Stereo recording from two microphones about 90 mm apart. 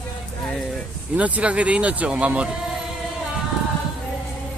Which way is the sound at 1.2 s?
15° right (ahead or behind).